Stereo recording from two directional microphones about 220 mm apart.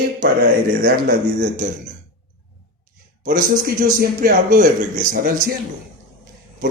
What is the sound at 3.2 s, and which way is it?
A man's voice, 40° right (ahead or behind).